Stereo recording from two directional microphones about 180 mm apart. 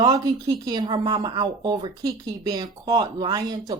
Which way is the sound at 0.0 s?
20° right (ahead or behind).